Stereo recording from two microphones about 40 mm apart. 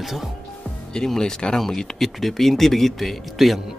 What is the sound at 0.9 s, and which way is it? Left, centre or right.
Speech, centre.